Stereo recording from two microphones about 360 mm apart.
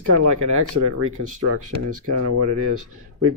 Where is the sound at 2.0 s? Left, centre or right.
Right.